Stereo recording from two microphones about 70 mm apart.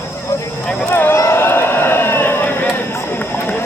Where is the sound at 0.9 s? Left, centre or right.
Left.